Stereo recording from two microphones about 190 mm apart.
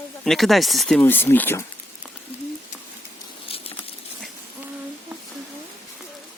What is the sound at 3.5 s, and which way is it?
Patter, 30° left (ahead or behind).